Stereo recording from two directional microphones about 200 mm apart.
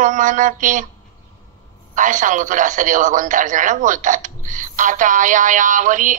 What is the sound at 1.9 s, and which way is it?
Speech, 40° right (ahead or behind).